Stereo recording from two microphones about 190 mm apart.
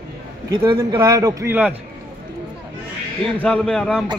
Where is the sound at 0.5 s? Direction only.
20° right (ahead or behind).